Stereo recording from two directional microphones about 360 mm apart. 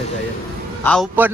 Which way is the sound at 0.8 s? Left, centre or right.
Centre.